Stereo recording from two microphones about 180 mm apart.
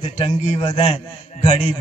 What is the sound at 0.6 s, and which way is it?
Speech, 25° left (ahead or behind).